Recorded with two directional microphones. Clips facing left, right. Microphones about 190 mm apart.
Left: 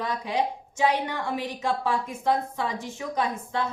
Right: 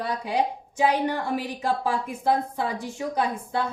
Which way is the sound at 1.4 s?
35° right (ahead or behind).